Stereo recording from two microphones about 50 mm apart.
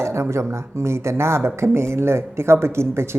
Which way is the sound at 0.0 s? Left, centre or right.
Right.